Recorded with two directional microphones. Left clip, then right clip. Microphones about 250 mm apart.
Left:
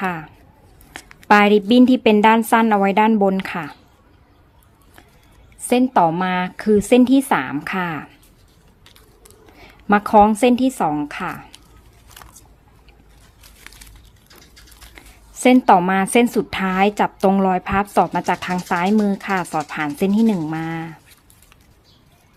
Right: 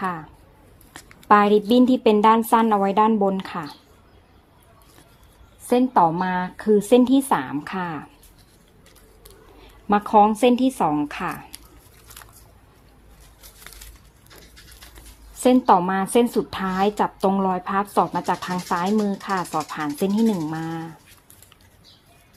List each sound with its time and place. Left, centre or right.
0.0 s speech: centre
5.6 s speech: centre
9.6 s a woman's voice: left
15.4 s speech: left